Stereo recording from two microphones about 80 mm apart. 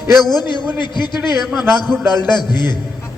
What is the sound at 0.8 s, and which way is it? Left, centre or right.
Speech, left.